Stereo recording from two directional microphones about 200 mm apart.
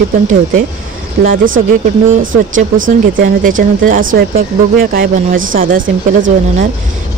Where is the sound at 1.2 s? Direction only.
45° right (ahead or behind).